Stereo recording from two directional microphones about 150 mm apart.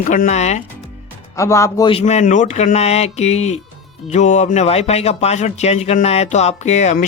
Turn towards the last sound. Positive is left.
turn(degrees=50)  # may be behind; listen again after turning